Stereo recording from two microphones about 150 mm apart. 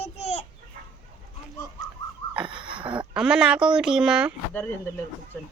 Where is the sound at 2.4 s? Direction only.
35° right (ahead or behind).